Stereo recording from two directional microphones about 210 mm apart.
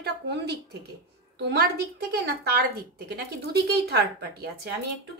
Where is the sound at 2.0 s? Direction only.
50° right (ahead or behind).